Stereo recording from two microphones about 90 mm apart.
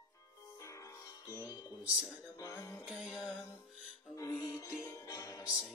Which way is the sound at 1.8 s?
10° right (ahead or behind).